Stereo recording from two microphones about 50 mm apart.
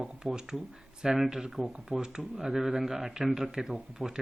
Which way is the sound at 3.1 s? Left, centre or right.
Centre.